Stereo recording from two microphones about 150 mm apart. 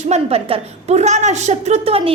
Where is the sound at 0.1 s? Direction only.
40° right (ahead or behind).